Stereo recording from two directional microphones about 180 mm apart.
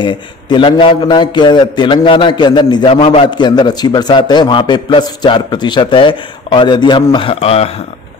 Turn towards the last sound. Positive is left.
turn(degrees=35)  # may be behind; listen again after turning